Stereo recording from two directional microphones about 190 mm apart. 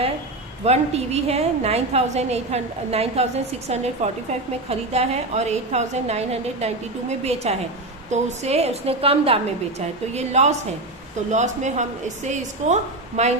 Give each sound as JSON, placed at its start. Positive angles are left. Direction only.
{"t": 0.7, "sound": "a woman's voice", "side_deg": -35}
{"t": 8.1, "sound": "a woman's voice", "side_deg": -35}